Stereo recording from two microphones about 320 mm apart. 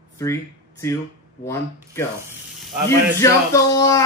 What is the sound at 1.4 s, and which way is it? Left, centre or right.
Speech, centre.